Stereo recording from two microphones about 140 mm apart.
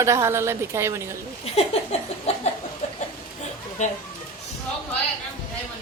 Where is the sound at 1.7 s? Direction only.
50° left (ahead or behind).